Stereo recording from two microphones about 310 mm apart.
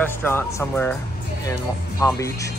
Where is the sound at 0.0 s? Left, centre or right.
Centre.